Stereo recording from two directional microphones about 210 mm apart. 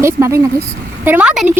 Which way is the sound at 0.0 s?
15° right (ahead or behind).